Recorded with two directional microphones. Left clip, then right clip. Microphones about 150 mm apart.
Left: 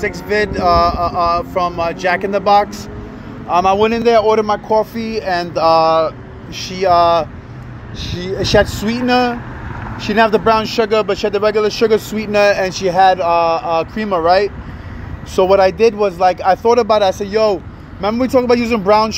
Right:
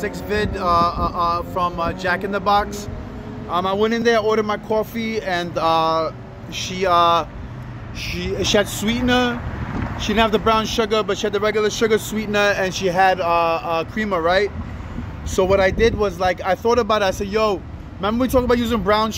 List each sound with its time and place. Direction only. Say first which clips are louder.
0.0 s speech: left 6 dB; 15° left (ahead or behind); by 7.2 s centre (ahead or behind)
8.0 s speech: left 2 dB; 50° left (ahead or behind)
8.5 s speech: left 8 dB; 5° left (ahead or behind)